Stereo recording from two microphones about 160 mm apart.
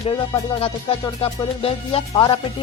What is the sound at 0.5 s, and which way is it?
Music, 35° left (ahead or behind).